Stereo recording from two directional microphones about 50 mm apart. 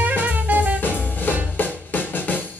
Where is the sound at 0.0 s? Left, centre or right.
Right.